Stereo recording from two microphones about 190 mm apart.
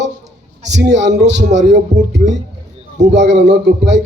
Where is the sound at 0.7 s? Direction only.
65° right (ahead or behind).